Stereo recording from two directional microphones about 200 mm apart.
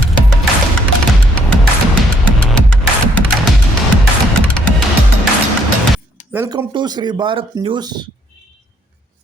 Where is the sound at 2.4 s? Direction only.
5° left (ahead or behind).